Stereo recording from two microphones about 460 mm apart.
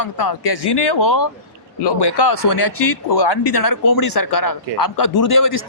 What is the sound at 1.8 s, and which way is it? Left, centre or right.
Speech, left.